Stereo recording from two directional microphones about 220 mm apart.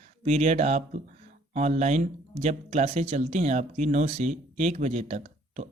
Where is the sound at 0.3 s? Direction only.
30° right (ahead or behind).